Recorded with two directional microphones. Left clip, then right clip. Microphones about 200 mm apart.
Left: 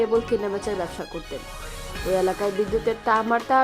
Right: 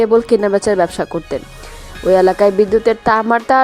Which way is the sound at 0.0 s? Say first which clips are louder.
Right 10 dB; 40° right (ahead or behind).